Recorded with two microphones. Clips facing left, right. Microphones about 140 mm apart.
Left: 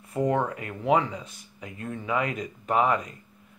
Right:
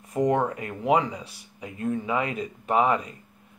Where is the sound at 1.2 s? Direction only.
35° right (ahead or behind).